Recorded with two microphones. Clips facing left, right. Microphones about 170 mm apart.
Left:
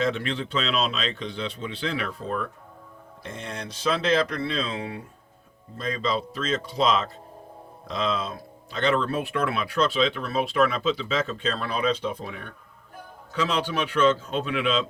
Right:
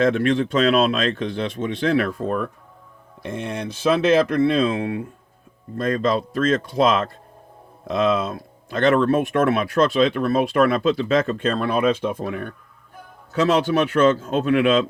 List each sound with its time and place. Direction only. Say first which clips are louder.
0.0 s speech: right 8 dB; 50° right (ahead or behind)
14.2 s speech: right 9 dB; 45° right (ahead or behind)